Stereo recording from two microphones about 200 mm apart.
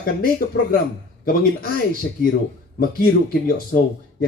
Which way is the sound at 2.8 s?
50° left (ahead or behind).